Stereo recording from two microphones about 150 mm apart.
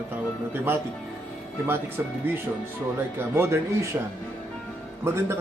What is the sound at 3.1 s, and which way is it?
Speech, 15° right (ahead or behind).